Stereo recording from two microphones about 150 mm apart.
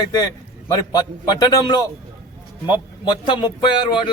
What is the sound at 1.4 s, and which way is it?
Speech, 25° left (ahead or behind).